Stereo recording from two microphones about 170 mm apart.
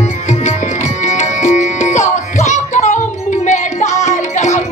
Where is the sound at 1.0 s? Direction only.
45° left (ahead or behind).